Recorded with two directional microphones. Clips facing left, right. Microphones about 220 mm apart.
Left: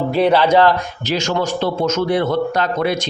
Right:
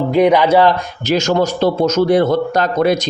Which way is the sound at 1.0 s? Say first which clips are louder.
Right 5 dB; 45° right (ahead or behind).